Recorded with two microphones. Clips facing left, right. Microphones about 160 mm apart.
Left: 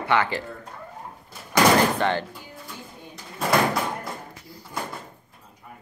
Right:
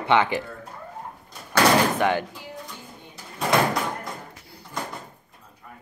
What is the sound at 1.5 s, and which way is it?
Door, 10° right (ahead or behind).